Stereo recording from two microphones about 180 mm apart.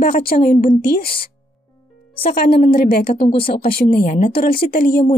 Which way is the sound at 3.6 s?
55° left (ahead or behind).